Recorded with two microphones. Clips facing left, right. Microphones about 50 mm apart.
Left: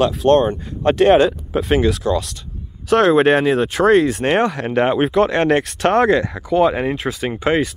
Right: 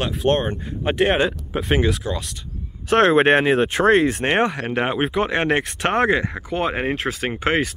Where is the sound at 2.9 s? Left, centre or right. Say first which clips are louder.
Left 2 dB; right.